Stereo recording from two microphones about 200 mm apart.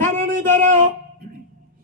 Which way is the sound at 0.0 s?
40° right (ahead or behind).